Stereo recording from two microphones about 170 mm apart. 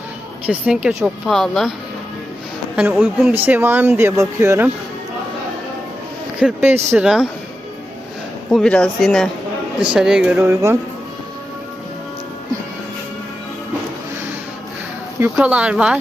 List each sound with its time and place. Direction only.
0.4 s a woman's voice: 10° right (ahead or behind)
2.7 s speech: 10° right (ahead or behind)
6.4 s a woman's voice: 5° right (ahead or behind)
8.4 s a woman's voice: 5° left (ahead or behind)
10.5 s speech: 15° right (ahead or behind)
15.4 s speech: 5° right (ahead or behind)